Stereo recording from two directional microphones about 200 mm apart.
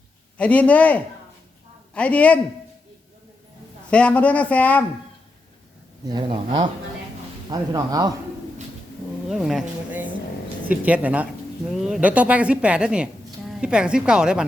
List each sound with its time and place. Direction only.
0.3 s a man's voice: 5° left (ahead or behind)
3.8 s a man's voice: 5° left (ahead or behind)
6.1 s speech: 25° right (ahead or behind)
9.3 s a sound: centre (ahead or behind)
10.7 s a woman's voice: 5° right (ahead or behind)